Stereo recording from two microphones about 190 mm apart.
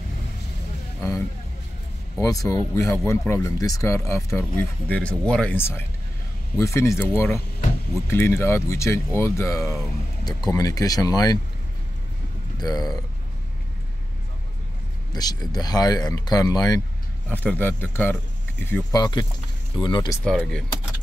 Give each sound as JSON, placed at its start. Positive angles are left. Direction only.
{"t": 2.1, "sound": "speech", "side_deg": 20}
{"t": 12.5, "sound": "speech", "side_deg": 20}
{"t": 15.1, "sound": "speech", "side_deg": 20}
{"t": 17.3, "sound": "speech", "side_deg": 10}
{"t": 20.2, "sound": "speech", "side_deg": 5}